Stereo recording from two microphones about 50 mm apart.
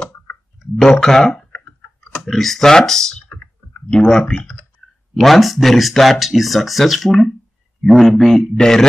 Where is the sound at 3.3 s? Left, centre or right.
Left.